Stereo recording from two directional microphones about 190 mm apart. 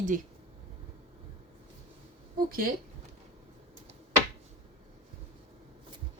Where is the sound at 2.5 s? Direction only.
50° right (ahead or behind).